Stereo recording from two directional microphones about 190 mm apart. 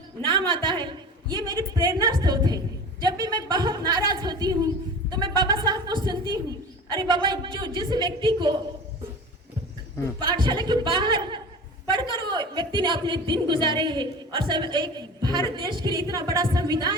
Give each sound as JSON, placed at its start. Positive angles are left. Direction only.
{"t": 0.3, "sound": "a woman's voice", "side_deg": -25}
{"t": 10.2, "sound": "a woman's voice", "side_deg": -25}